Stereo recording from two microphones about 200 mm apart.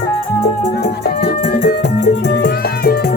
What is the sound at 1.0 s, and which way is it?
Music, 55° left (ahead or behind).